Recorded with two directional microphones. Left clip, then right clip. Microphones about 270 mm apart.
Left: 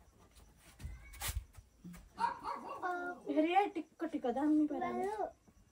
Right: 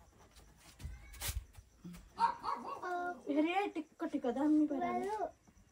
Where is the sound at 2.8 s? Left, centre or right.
Centre.